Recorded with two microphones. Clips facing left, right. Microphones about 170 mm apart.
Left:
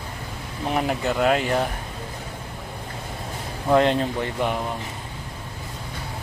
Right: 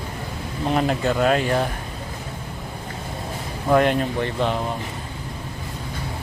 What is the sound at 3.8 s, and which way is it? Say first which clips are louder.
Speech: even; 25° left (ahead or behind).